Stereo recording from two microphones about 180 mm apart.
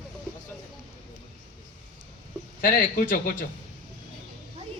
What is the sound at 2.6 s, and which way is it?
Speech, 50° left (ahead or behind).